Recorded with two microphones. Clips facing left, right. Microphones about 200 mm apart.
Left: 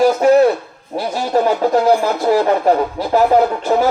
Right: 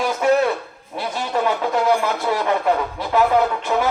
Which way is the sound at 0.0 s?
35° left (ahead or behind).